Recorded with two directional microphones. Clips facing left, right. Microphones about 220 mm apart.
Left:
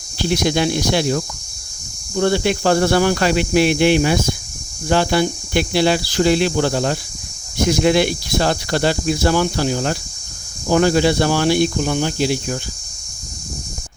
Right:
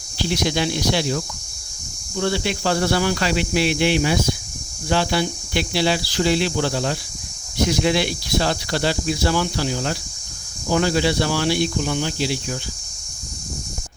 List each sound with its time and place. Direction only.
0.2 s speech: 50° left (ahead or behind)